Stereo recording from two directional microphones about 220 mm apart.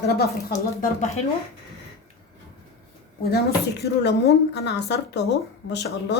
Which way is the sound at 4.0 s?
50° left (ahead or behind).